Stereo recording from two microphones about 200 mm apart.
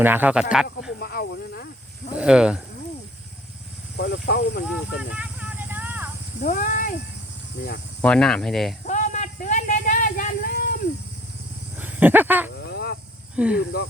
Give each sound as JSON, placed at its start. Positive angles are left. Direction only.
{"t": 0.0, "sound": "speech", "side_deg": -10}
{"t": 0.9, "sound": "snake", "side_deg": 50}
{"t": 2.1, "sound": "speech", "side_deg": -5}
{"t": 3.9, "sound": "speech", "side_deg": 55}
{"t": 4.6, "sound": "a sound", "side_deg": -5}
{"t": 6.4, "sound": "speech", "side_deg": 40}
{"t": 8.0, "sound": "speech", "side_deg": 5}
{"t": 8.9, "sound": "a sound", "side_deg": 40}
{"t": 11.8, "sound": "speech", "side_deg": -10}
{"t": 12.5, "sound": "a sound", "side_deg": 55}
{"t": 13.3, "sound": "speech", "side_deg": -5}